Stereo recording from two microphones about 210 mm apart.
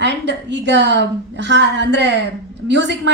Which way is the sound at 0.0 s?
55° right (ahead or behind).